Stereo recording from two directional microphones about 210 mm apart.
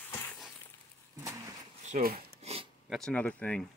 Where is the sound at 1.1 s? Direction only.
15° right (ahead or behind).